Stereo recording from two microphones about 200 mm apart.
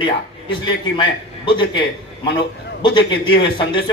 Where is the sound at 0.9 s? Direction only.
25° left (ahead or behind).